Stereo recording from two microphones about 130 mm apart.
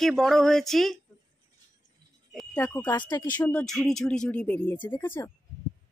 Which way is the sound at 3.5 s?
5° left (ahead or behind).